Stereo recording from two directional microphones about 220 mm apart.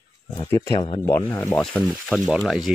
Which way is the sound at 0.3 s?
15° left (ahead or behind).